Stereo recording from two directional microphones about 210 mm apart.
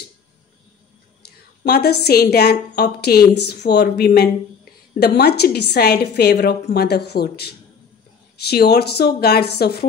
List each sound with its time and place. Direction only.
1.6 s a woman's voice: 50° left (ahead or behind)